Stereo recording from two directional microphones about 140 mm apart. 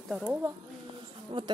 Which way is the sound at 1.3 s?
45° right (ahead or behind).